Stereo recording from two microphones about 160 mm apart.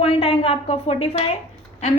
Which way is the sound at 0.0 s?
35° left (ahead or behind).